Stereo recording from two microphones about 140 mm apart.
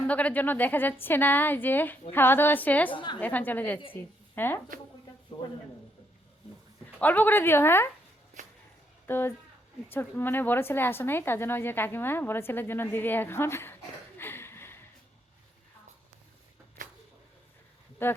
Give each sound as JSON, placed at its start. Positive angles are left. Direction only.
{"t": 0.1, "sound": "a woman's voice", "side_deg": 10}
{"t": 2.9, "sound": "a woman's voice", "side_deg": 35}
{"t": 3.2, "sound": "a woman's voice", "side_deg": 10}
{"t": 7.0, "sound": "a woman's voice", "side_deg": 10}
{"t": 9.0, "sound": "a woman's voice", "side_deg": 15}
{"t": 14.2, "sound": "a sound", "side_deg": 15}
{"t": 18.0, "sound": "a woman's voice", "side_deg": 15}